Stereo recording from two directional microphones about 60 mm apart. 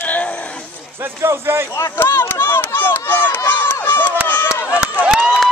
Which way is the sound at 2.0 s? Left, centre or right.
Left.